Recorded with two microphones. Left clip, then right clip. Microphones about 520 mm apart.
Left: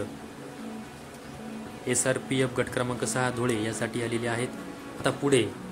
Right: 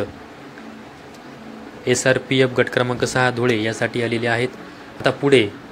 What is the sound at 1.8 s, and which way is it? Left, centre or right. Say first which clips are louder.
Speech: right 10 dB; left.